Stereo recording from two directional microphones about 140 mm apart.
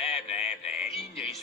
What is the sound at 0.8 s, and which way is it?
Music, 45° left (ahead or behind).